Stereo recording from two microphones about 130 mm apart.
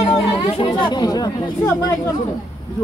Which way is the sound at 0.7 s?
35° left (ahead or behind).